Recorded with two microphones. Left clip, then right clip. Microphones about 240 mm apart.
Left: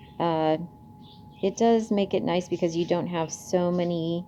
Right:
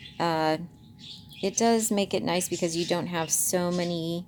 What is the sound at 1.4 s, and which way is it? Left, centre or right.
A woman's voice, right.